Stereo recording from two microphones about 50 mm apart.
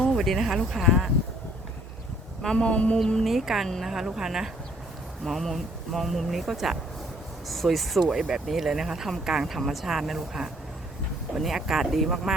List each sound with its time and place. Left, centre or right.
0.1 s speech: centre
2.6 s a woman's voice: left
3.2 s speech: centre
5.2 s speech: centre